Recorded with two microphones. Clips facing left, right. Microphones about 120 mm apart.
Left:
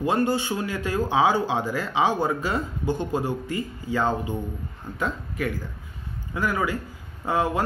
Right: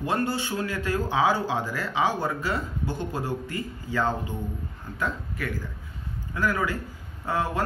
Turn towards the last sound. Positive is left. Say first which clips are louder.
# left 3 dB
turn(degrees=15)  # may be behind; listen again after turning